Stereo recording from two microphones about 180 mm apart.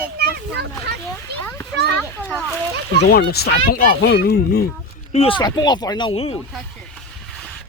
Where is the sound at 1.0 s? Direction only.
10° left (ahead or behind).